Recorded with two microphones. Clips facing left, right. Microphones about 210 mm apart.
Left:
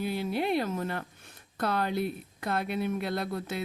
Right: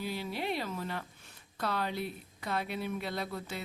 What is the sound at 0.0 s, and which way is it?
A woman's voice, 55° left (ahead or behind).